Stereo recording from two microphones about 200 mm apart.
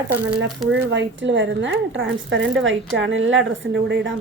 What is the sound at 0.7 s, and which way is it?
Speech, 60° right (ahead or behind).